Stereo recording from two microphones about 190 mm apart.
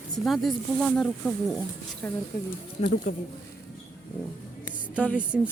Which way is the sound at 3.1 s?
35° left (ahead or behind).